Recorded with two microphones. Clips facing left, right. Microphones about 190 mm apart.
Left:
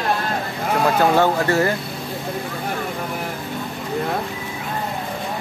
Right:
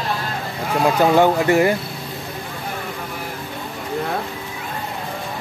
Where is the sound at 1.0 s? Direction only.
15° right (ahead or behind).